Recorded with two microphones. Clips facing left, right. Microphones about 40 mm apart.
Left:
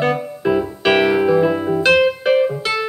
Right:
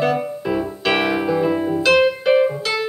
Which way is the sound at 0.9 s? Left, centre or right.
Centre.